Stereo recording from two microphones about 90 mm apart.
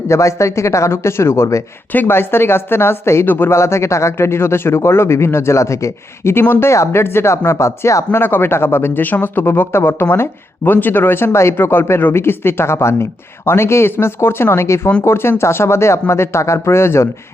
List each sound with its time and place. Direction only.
0.1 s speech: 35° left (ahead or behind)